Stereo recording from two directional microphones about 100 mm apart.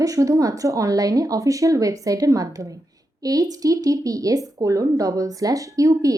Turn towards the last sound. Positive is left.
turn(degrees=-35)  # may be behind; listen again after turning